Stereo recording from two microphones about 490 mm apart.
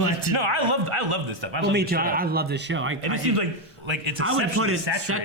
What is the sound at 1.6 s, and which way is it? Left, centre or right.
Speech, centre.